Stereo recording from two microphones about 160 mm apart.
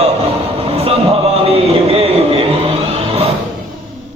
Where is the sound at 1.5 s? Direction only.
40° right (ahead or behind).